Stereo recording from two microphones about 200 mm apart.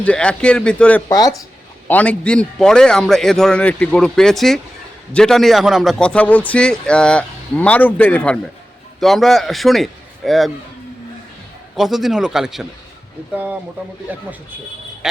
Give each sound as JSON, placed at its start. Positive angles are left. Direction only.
{"t": 0.0, "sound": "a man's voice", "side_deg": 5}
{"t": 1.0, "sound": "speech", "side_deg": 20}
{"t": 1.9, "sound": "a man's voice", "side_deg": 5}
{"t": 11.8, "sound": "a man's voice", "side_deg": 0}